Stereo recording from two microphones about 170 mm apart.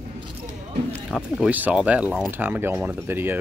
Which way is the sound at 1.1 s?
5° right (ahead or behind).